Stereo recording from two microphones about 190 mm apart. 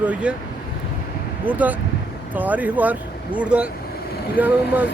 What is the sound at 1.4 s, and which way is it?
Speech, 10° right (ahead or behind).